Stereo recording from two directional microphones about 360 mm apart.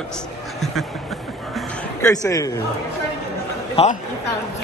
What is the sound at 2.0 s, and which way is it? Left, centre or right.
Speech, centre.